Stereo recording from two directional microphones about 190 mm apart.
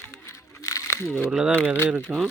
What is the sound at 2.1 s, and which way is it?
Speech, 5° right (ahead or behind).